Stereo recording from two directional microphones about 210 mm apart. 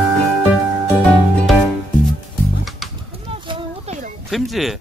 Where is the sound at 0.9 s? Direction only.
Centre (ahead or behind).